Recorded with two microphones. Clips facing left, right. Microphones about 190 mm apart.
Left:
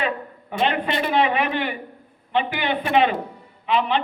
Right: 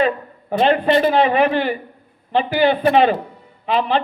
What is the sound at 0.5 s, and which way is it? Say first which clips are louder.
Speech: right 8 dB; 40° right (ahead or behind).